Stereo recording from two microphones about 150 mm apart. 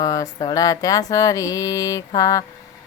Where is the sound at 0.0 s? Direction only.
25° left (ahead or behind).